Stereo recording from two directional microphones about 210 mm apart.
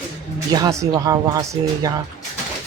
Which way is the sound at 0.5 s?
15° right (ahead or behind).